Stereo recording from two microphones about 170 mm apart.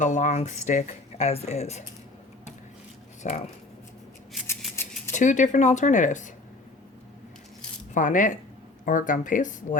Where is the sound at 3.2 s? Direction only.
45° left (ahead or behind).